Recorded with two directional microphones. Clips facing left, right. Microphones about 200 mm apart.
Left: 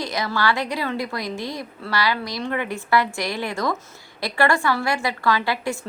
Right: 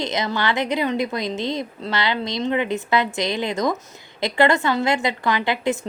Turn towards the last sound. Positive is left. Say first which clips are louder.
# right 1 dB
turn(degrees=-20)  # may be behind; listen again after turning